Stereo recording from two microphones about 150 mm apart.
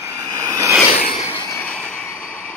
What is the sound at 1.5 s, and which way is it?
Train, 10° left (ahead or behind).